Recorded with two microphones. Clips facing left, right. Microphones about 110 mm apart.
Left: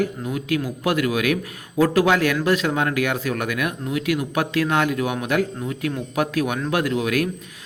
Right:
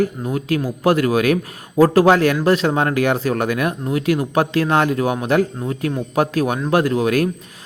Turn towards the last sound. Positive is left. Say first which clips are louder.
# right 4 dB
turn(degrees=-35)  # may be behind; listen again after turning